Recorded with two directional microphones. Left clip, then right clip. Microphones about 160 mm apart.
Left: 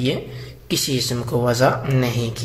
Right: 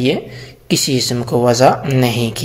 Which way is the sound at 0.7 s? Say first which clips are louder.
Right 6 dB; 30° right (ahead or behind).